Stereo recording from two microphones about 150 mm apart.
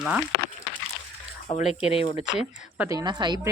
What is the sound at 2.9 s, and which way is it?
Speech, 25° right (ahead or behind).